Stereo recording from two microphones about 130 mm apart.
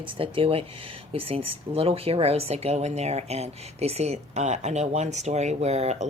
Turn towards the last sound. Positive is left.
turn(degrees=-60)  # may be behind; listen again after turning